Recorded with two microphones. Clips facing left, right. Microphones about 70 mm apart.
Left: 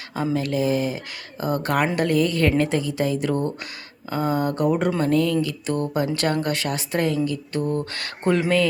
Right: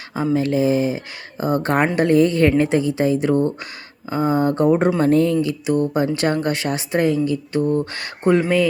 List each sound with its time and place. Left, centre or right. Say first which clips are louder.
0.3 s speech: right 5 dB; right